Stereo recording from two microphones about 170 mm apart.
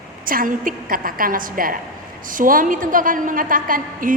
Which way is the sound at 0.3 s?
55° right (ahead or behind).